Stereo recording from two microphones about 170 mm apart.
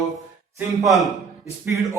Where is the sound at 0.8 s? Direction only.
Centre (ahead or behind).